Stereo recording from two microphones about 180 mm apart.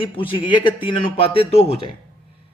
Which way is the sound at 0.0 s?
30° left (ahead or behind).